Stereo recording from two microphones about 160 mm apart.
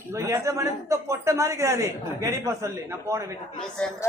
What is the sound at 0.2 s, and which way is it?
A man's voice, 15° right (ahead or behind).